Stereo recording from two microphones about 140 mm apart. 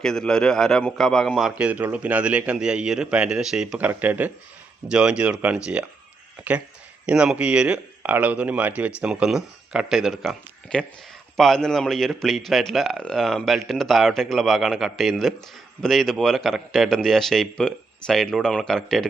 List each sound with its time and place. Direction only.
0.0 s a man's voice: 5° left (ahead or behind)
7.0 s a man's voice: 5° right (ahead or behind)